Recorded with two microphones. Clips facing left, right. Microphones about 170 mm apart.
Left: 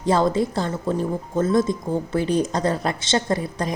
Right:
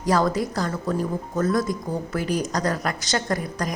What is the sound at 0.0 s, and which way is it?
Speech, 25° left (ahead or behind).